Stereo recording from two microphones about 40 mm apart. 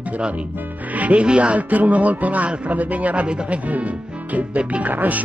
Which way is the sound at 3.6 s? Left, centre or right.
Right.